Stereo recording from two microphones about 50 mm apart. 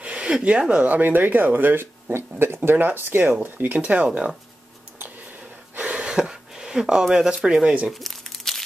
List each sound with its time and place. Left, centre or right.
0.0 s speech: right
3.7 s speech: right
5.8 s a sound: right
6.0 s speech: centre
7.9 s crumpling: centre